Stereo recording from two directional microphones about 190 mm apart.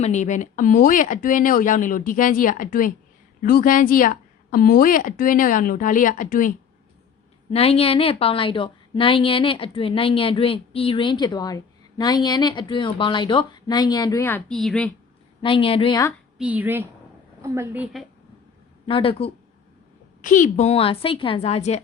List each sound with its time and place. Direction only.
0.0 s a woman's voice: 40° left (ahead or behind)
7.5 s a woman's voice: 30° left (ahead or behind); by 14.9 s 5° left (ahead or behind)
15.4 s a woman's voice: 25° left (ahead or behind)
16.4 s a woman's voice: 10° right (ahead or behind)
18.9 s a woman's voice: 30° left (ahead or behind)
20.2 s a woman's voice: 40° left (ahead or behind)